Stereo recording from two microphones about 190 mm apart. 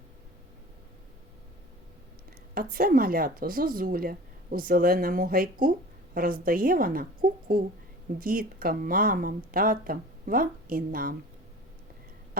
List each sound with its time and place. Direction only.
2.6 s speech: 50° right (ahead or behind)